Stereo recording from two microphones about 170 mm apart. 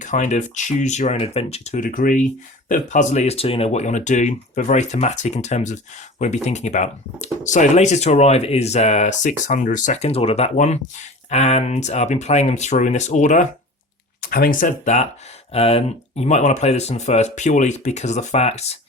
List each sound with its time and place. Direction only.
0.0 s speech: 45° left (ahead or behind)
14.2 s speech: 60° left (ahead or behind)
15.5 s speech: 35° left (ahead or behind)